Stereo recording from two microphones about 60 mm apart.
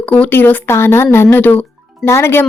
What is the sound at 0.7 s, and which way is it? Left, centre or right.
Speech, left.